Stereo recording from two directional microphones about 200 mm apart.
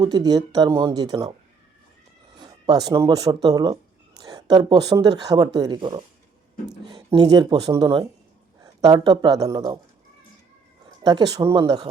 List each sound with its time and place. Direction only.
0.0 s speech: 20° right (ahead or behind)
2.3 s speech: 20° right (ahead or behind)
4.2 s a sound: 20° right (ahead or behind)
4.9 s speech: 20° right (ahead or behind)
11.0 s speech: 20° right (ahead or behind)